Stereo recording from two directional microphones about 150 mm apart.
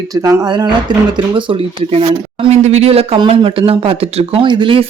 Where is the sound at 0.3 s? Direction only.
25° right (ahead or behind).